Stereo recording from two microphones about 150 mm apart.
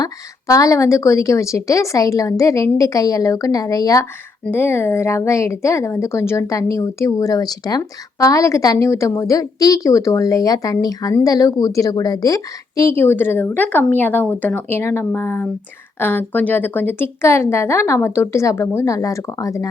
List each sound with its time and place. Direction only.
0.0 s a woman's voice: 25° left (ahead or behind)